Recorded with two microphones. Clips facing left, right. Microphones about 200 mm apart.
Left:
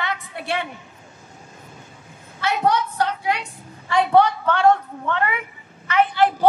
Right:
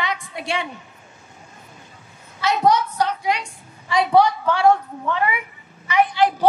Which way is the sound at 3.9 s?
10° right (ahead or behind).